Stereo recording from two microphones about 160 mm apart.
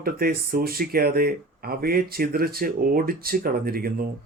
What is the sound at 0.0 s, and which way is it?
Speech, 65° right (ahead or behind).